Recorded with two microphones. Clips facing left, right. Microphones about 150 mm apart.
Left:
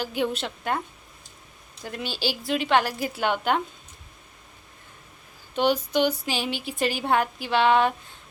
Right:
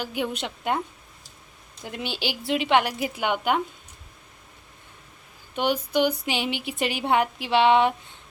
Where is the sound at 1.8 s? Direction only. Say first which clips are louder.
Left 1 dB; 20° right (ahead or behind).